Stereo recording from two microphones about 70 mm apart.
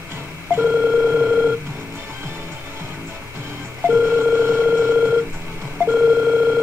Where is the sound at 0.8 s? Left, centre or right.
Right.